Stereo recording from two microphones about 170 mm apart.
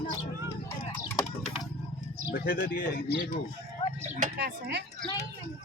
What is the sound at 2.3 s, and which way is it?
Speech, 65° left (ahead or behind).